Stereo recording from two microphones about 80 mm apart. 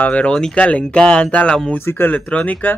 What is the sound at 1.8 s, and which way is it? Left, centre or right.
Speech, left.